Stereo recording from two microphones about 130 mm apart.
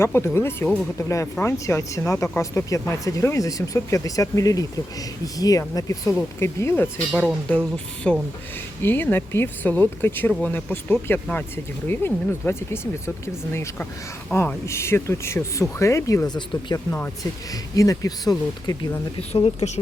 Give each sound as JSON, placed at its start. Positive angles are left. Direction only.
{"t": 0.0, "sound": "speech", "side_deg": 20}
{"t": 7.1, "sound": "speech", "side_deg": 0}
{"t": 8.1, "sound": "speech", "side_deg": 10}
{"t": 19.3, "sound": "speech", "side_deg": 50}